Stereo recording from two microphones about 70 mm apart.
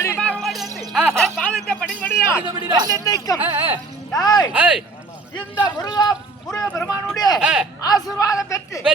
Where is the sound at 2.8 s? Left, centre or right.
Left.